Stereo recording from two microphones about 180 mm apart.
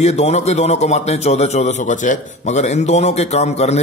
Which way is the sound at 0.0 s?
35° left (ahead or behind).